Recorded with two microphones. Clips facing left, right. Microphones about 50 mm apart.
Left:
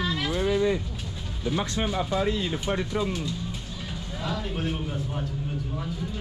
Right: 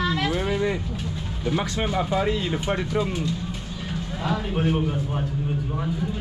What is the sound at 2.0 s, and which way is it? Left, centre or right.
Speech, right.